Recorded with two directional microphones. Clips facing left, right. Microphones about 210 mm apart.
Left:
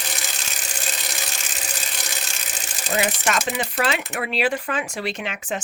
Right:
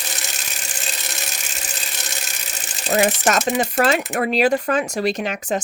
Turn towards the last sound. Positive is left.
turn(degrees=-40)  # may be behind; listen again after turning